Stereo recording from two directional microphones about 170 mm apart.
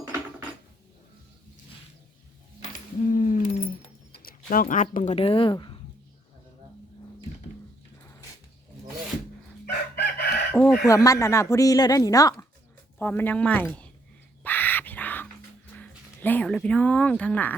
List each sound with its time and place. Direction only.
2.7 s a sound: 50° left (ahead or behind)
4.2 s speech: 55° left (ahead or behind)
5.1 s speech: 35° left (ahead or behind)
9.9 s chicken: 75° left (ahead or behind)
10.5 s speech: 5° left (ahead or behind)
10.8 s a woman's voice: 20° left (ahead or behind)
14.4 s crow: 10° left (ahead or behind)
15.8 s a sound: 10° left (ahead or behind)
16.6 s a woman's voice: 5° left (ahead or behind)